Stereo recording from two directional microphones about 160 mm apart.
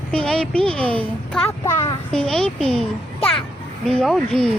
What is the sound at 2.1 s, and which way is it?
Speech, 5° left (ahead or behind).